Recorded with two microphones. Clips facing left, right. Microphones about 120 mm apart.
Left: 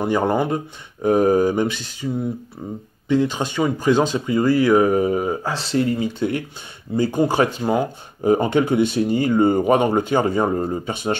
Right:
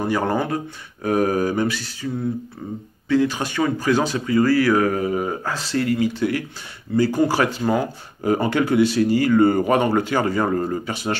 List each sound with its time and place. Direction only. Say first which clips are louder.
0.0 s speech: left 2 dB; 15° left (ahead or behind)
3.1 s speech: even; 20° left (ahead or behind)